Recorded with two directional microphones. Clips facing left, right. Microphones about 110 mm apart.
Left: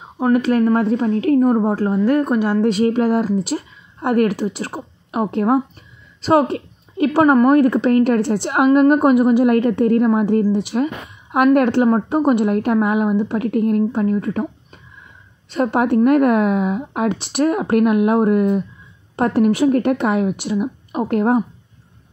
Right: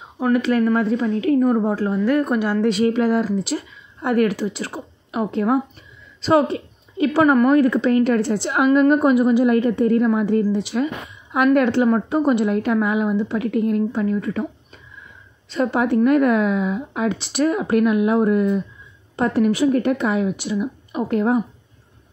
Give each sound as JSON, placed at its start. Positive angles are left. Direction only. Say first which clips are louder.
{"t": 0.3, "sound": "speech", "louder": "left 2 dB", "side_deg": 45}
{"t": 2.6, "sound": "a woman's voice", "louder": "left 2 dB", "side_deg": 40}
{"t": 10.1, "sound": "speech", "louder": "left 2 dB", "side_deg": 45}
{"t": 15.5, "sound": "a woman's voice", "louder": "left 2 dB", "side_deg": 55}